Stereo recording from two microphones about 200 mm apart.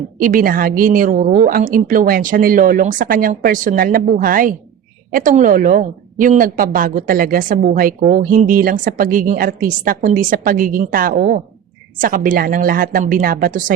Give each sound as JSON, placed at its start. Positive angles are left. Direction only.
{"t": 0.2, "sound": "a woman's voice", "side_deg": -45}